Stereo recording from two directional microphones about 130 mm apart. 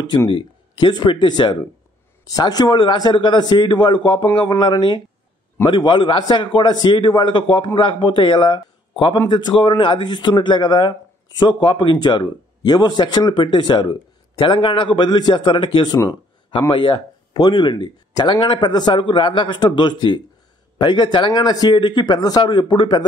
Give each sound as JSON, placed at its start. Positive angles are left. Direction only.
{"t": 0.3, "sound": "speech", "side_deg": 35}